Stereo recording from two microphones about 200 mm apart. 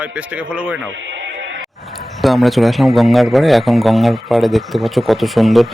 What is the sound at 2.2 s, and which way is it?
A man's voice, centre (ahead or behind).